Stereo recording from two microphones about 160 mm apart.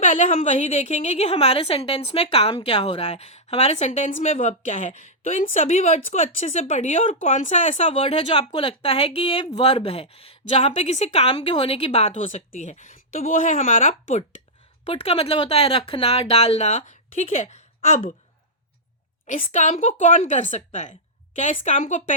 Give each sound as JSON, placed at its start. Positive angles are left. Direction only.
{"t": 0.0, "sound": "a woman's voice", "side_deg": 50}
{"t": 14.8, "sound": "a woman's voice", "side_deg": 35}
{"t": 19.4, "sound": "a woman's voice", "side_deg": 50}